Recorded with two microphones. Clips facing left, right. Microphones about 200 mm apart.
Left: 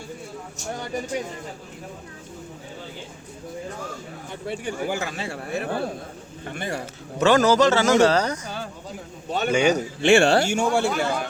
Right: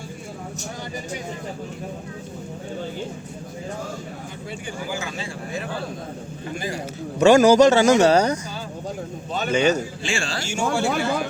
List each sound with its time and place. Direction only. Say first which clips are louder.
4.4 s speech: left 5 dB; 60° left (ahead or behind)
7.2 s speech: right 4 dB; 15° right (ahead or behind)
9.5 s a man's voice: right 1 dB; 10° left (ahead or behind)
10.0 s speech: left 11 dB; 65° left (ahead or behind)